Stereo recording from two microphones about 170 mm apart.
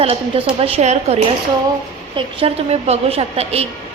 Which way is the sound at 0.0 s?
35° right (ahead or behind).